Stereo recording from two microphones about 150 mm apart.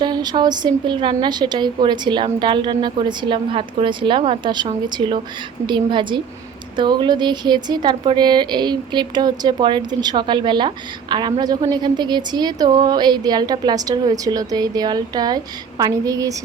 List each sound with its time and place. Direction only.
0.0 s a woman's voice: 30° right (ahead or behind)